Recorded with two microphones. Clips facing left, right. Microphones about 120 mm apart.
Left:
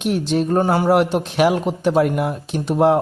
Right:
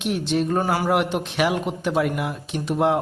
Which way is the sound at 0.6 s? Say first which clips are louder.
Left 5 dB; 30° left (ahead or behind).